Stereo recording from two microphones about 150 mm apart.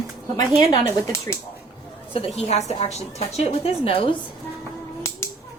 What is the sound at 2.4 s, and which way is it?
A woman's voice, 50° left (ahead or behind).